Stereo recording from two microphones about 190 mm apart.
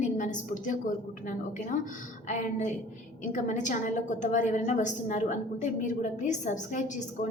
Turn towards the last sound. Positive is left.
turn(degrees=40)  # may be behind; listen again after turning